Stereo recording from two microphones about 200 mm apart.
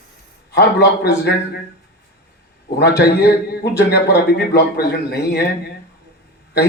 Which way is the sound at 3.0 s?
55° left (ahead or behind).